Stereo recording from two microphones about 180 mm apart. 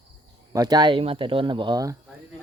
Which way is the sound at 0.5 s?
20° right (ahead or behind).